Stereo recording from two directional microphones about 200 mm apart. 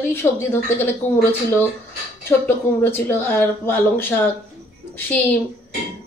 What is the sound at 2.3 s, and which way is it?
A woman's voice, 10° left (ahead or behind).